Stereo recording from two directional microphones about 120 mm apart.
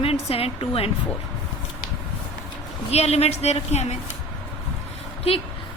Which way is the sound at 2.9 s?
60° left (ahead or behind).